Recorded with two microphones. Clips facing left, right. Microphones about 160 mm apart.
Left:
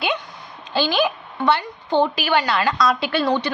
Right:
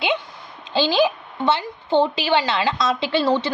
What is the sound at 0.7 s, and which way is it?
A woman's voice, 20° right (ahead or behind).